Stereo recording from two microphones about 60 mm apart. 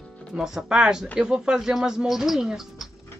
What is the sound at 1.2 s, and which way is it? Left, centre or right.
Music, centre.